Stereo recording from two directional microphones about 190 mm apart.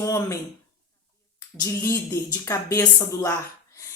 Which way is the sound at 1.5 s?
15° left (ahead or behind).